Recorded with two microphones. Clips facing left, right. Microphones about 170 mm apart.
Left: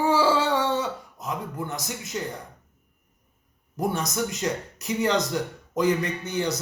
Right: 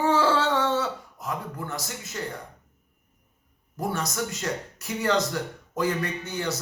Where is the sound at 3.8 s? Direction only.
20° left (ahead or behind).